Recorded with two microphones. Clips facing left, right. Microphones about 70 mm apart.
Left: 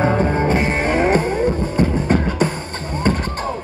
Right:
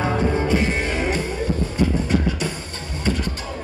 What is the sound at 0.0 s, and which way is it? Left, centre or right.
Music, left.